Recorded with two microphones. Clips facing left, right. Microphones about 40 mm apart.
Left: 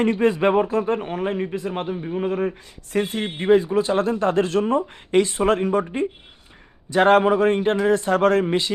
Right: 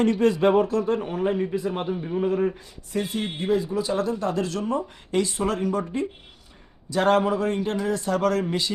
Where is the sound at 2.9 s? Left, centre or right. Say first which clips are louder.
Left 4 dB; left.